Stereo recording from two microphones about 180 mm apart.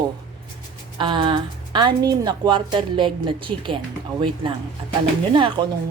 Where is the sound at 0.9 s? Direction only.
25° right (ahead or behind).